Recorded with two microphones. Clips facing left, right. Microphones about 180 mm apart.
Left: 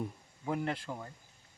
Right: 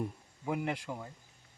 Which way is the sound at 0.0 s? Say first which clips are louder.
Right 1 dB; 10° right (ahead or behind).